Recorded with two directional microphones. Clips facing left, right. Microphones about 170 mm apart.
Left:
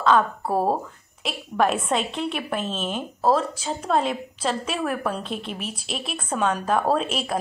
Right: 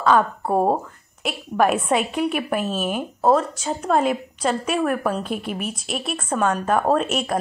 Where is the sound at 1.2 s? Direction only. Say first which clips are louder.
Right 3 dB; 5° right (ahead or behind).